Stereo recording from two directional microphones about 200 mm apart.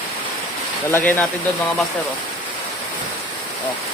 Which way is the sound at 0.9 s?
10° left (ahead or behind).